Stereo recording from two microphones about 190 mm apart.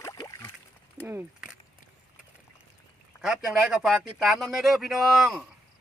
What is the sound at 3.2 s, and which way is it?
Speech, 5° right (ahead or behind).